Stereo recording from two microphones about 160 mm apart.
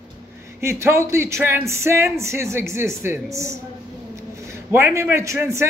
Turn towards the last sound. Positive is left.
turn(degrees=-15)  # may be behind; listen again after turning